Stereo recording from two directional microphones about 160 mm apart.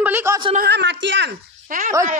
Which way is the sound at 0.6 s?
90° right.